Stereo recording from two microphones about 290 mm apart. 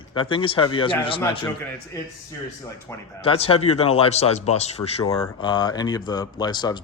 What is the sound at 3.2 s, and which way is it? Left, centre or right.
Speech, centre.